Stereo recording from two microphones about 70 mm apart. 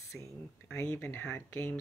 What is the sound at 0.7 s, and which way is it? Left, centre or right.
Speech, left.